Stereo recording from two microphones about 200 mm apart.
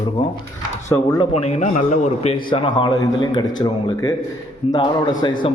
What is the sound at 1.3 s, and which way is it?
A man's voice, 35° left (ahead or behind).